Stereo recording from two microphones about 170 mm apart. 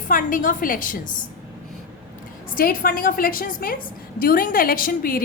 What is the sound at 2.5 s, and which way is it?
A woman's voice, 55° left (ahead or behind).